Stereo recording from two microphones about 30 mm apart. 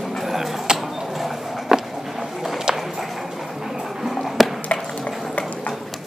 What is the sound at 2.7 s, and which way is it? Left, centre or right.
Clip-clop, right.